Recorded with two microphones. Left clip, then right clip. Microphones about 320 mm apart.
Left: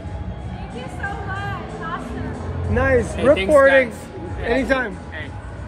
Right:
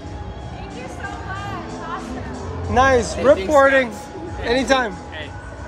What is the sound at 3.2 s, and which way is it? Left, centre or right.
Speech, centre.